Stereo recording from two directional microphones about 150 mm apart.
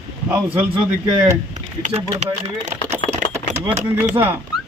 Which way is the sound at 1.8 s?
45° right (ahead or behind).